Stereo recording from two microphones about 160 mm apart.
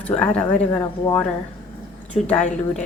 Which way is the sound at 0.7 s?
20° left (ahead or behind).